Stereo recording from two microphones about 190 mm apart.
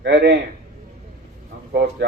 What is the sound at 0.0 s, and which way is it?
Speech, 65° right (ahead or behind).